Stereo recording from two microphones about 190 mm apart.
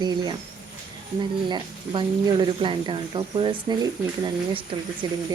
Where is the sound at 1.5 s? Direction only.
25° right (ahead or behind).